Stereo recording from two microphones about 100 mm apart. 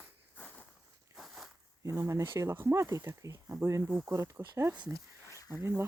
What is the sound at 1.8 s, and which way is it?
Speech, 35° right (ahead or behind).